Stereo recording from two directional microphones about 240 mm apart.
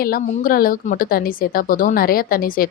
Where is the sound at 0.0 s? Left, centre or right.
Left.